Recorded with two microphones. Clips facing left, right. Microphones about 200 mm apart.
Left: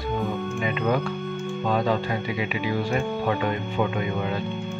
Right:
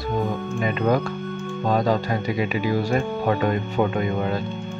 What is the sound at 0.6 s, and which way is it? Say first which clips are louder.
Speech: right 4 dB; 40° right (ahead or behind).